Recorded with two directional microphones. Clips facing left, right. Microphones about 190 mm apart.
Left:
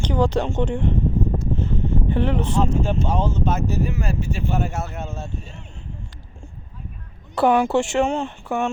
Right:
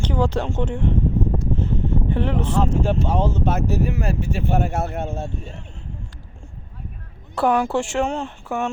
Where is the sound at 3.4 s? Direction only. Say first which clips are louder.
Right 1 dB; 65° right (ahead or behind).